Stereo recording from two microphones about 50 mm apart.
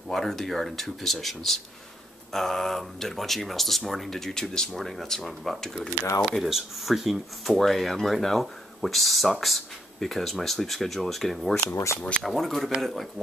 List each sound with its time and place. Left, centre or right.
0.1 s speech: centre
11.7 s speech: left
12.2 s speech: centre